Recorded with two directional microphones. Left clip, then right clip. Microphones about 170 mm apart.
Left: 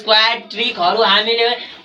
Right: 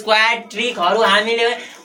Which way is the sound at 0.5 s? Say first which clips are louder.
Left 1 dB; 10° right (ahead or behind).